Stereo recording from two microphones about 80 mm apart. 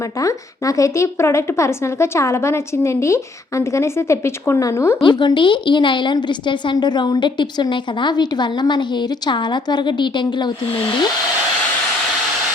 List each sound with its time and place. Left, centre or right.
0.2 s a woman's voice: left
5.0 s a woman's voice: left